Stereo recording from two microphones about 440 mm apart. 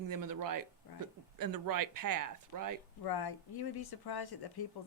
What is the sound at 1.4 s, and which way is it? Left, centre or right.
Speech, right.